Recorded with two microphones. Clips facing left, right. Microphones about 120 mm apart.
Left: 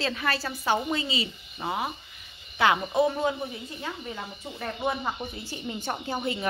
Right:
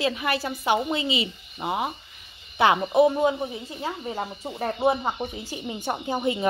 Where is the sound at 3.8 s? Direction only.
35° right (ahead or behind).